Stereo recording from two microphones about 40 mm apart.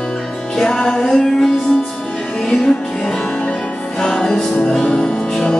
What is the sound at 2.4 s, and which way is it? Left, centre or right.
Music, centre.